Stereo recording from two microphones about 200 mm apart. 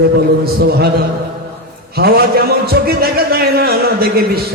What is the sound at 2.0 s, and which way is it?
A man's voice, 50° right (ahead or behind).